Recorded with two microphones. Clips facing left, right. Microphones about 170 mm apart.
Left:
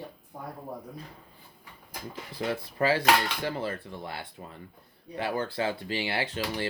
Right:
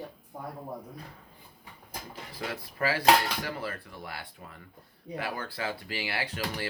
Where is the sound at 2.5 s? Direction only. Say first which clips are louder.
Left 5 dB; 25° left (ahead or behind).